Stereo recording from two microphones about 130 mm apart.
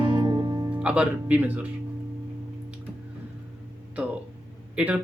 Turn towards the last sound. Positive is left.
turn(degrees=-10)  # may be behind; listen again after turning